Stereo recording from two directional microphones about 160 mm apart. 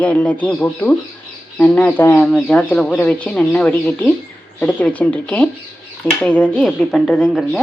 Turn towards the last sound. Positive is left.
turn(degrees=0)  # may be behind; listen again after turning